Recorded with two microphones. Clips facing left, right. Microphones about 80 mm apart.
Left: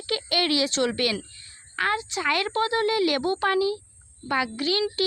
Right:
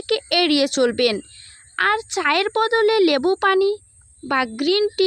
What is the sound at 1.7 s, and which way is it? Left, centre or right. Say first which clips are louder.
A child's voice: right 6 dB; right.